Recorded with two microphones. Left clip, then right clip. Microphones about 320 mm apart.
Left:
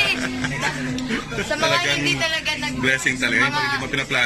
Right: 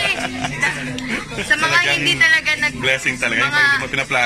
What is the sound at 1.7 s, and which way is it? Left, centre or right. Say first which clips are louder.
A man's voice: right 4 dB; centre.